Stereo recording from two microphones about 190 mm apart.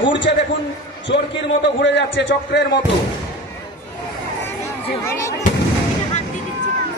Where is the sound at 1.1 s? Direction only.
65° left (ahead or behind).